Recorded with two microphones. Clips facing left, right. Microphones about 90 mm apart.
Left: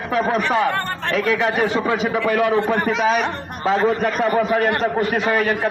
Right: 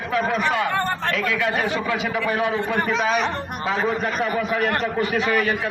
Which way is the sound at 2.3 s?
55° left (ahead or behind).